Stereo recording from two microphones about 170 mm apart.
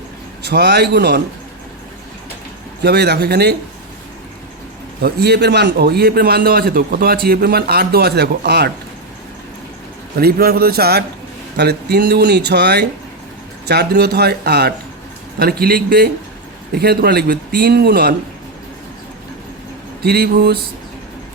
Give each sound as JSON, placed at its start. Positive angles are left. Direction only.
{"t": 0.4, "sound": "a man's voice", "side_deg": -80}
{"t": 2.8, "sound": "a man's voice", "side_deg": -75}
{"t": 5.0, "sound": "a man's voice", "side_deg": -75}
{"t": 10.2, "sound": "a man's voice", "side_deg": -60}
{"t": 20.0, "sound": "a man's voice", "side_deg": -65}